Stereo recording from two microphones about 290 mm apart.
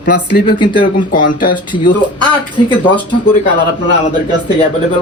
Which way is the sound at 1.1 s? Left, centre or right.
Left.